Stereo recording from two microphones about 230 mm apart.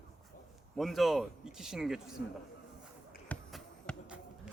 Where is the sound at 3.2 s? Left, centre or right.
Centre.